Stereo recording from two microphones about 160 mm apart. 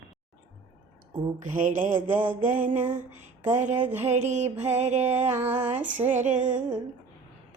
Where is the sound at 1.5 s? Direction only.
55° right (ahead or behind).